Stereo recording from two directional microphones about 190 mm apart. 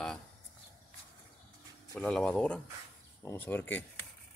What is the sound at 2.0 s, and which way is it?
Speech, 5° left (ahead or behind).